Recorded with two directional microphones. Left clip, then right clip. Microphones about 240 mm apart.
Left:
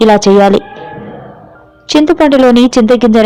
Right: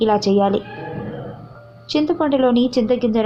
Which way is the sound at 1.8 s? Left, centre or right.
Left.